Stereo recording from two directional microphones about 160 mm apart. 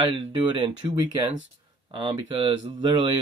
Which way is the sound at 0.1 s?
35° right (ahead or behind).